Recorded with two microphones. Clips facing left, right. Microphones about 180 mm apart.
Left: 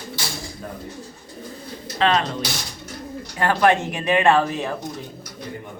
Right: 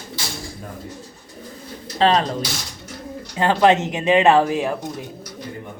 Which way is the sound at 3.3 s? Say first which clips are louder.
Right 2 dB; 20° right (ahead or behind).